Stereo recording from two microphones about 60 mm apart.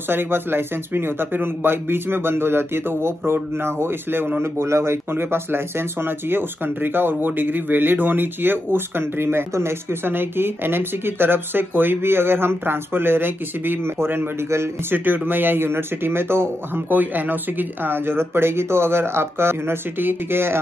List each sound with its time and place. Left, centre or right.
0.1 s speech: right